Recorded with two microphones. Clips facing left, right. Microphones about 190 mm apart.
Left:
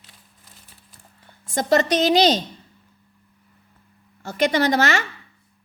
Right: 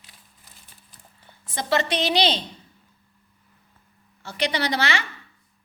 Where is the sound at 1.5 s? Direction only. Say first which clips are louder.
Left 5 dB; 45° left (ahead or behind).